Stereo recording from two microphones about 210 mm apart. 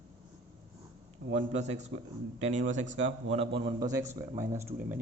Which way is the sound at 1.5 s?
35° right (ahead or behind).